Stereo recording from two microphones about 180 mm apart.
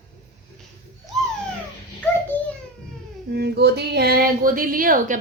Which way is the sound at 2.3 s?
10° left (ahead or behind).